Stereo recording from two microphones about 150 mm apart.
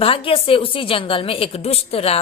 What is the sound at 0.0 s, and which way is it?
A woman's voice, 35° left (ahead or behind).